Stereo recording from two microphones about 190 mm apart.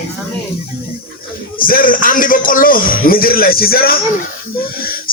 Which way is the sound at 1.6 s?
50° left (ahead or behind).